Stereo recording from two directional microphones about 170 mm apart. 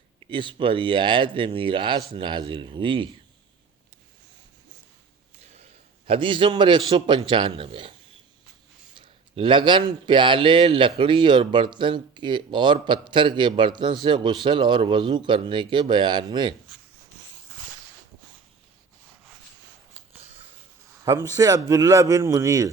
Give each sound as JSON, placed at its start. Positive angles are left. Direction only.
{"t": 0.3, "sound": "speech", "side_deg": -30}
{"t": 6.1, "sound": "speech", "side_deg": -30}
{"t": 9.0, "sound": "speech", "side_deg": -30}
{"t": 19.9, "sound": "a sound", "side_deg": -40}
{"t": 21.0, "sound": "speech", "side_deg": -20}